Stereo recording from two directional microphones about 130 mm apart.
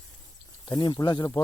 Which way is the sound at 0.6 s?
35° left (ahead or behind).